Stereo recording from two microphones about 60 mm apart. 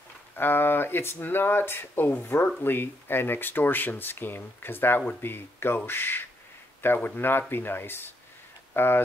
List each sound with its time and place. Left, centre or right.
0.4 s speech: left